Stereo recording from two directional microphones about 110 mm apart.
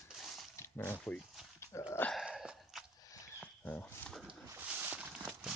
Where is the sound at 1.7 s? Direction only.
20° left (ahead or behind).